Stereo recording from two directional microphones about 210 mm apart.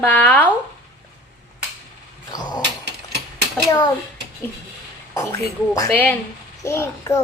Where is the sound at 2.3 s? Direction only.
20° left (ahead or behind).